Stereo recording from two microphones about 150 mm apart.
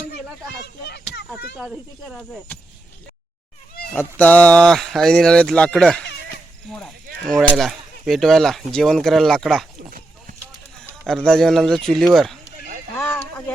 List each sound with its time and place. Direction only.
0.6 s speech: 90° left
1.5 s speech: 5° right (ahead or behind)
3.9 s speech: 10° left (ahead or behind)
11.0 s speech: 5° left (ahead or behind)
13.0 s sheep: 15° left (ahead or behind)